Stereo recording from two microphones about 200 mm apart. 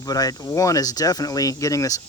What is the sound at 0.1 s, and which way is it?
Speech, 20° left (ahead or behind).